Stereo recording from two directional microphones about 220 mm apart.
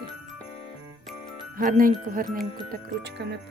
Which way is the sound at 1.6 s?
40° right (ahead or behind).